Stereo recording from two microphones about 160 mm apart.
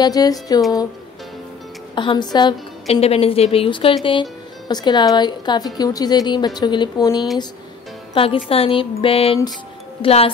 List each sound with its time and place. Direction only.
0.0 s a woman's voice: 25° left (ahead or behind)
2.0 s a woman's voice: 30° left (ahead or behind)
8.1 s speech: 35° left (ahead or behind)